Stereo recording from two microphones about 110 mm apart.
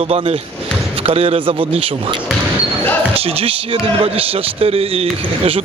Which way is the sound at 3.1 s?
60° right (ahead or behind).